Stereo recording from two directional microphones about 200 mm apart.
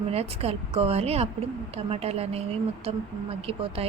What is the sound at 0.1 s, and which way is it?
A woman's voice, 30° right (ahead or behind).